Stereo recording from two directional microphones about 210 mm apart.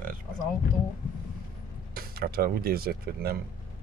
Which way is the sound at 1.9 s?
45° right (ahead or behind).